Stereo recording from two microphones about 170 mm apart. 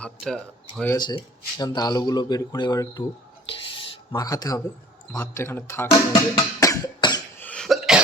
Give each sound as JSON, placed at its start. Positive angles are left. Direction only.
{"t": 0.0, "sound": "speech", "side_deg": 5}
{"t": 0.9, "sound": "speech", "side_deg": 25}
{"t": 4.1, "sound": "speech", "side_deg": 20}
{"t": 6.3, "sound": "cough", "side_deg": 25}
{"t": 7.3, "sound": "cough", "side_deg": 10}